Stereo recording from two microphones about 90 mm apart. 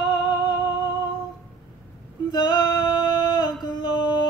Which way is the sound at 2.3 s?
55° left (ahead or behind).